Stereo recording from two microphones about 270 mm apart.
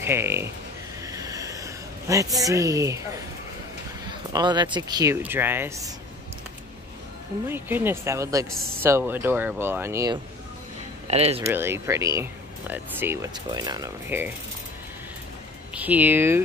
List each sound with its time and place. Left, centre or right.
0.0 s speech: centre
1.0 s a sound: centre
4.1 s speech: centre
7.4 s speech: centre
11.1 s speech: right
11.4 s speech: centre
15.7 s speech: centre